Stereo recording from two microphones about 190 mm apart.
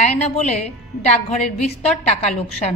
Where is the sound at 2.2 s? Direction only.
35° left (ahead or behind).